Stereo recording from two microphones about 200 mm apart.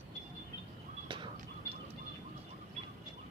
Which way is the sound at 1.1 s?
25° right (ahead or behind).